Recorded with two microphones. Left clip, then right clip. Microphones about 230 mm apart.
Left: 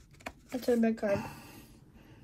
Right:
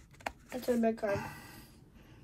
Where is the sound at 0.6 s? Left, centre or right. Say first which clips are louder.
Left 2 dB; left.